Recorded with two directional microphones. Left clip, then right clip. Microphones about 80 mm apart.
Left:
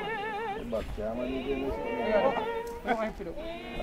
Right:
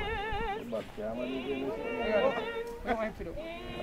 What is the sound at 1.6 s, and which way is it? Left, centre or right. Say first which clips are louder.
Music: left 2 dB; centre.